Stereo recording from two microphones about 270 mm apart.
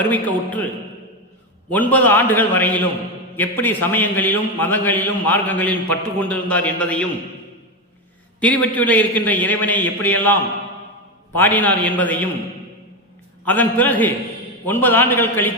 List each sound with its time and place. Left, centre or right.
0.1 s a man's voice: centre
1.7 s a man's voice: centre
8.4 s a man's voice: centre
11.3 s a man's voice: centre
13.4 s a man's voice: centre